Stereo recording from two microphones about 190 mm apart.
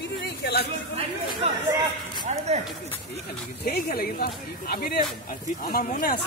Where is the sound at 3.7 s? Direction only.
55° left (ahead or behind).